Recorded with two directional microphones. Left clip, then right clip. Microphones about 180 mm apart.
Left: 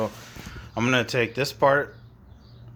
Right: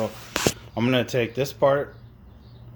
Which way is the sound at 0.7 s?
10° right (ahead or behind).